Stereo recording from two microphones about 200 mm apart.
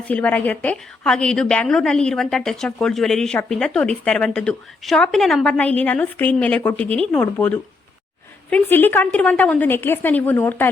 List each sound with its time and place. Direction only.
0.1 s a woman's voice: 5° left (ahead or behind)
6.8 s speech: 30° right (ahead or behind)
7.1 s a woman's voice: 5° left (ahead or behind)